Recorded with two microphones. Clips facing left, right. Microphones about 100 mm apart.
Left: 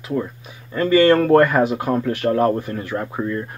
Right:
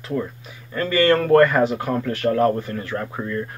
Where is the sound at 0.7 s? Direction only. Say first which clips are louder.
Left 4 dB; 20° left (ahead or behind).